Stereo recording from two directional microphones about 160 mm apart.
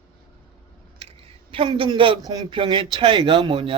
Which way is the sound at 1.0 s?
35° right (ahead or behind).